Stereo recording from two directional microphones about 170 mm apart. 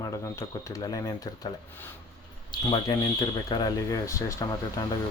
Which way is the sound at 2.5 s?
25° left (ahead or behind).